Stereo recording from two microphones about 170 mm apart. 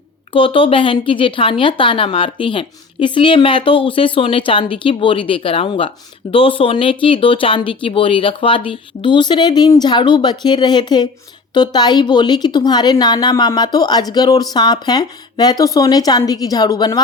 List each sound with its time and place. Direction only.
0.3 s a woman's voice: 30° left (ahead or behind)